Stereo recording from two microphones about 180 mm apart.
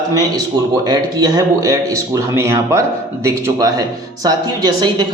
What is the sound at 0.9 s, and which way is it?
A man's voice, 20° right (ahead or behind).